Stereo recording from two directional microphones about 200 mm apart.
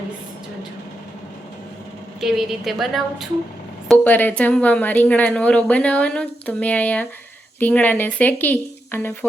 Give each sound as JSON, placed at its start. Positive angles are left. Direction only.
{"t": 2.2, "sound": "a woman's voice", "side_deg": 0}